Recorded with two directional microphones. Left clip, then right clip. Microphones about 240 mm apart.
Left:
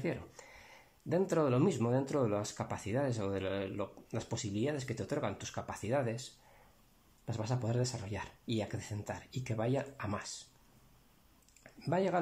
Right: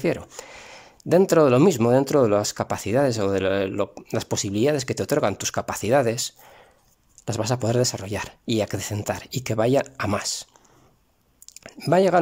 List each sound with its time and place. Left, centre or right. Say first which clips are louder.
0.0 s speech: right 14 dB; right
7.2 s speech: right 15 dB; right
11.6 s speech: right 15 dB; right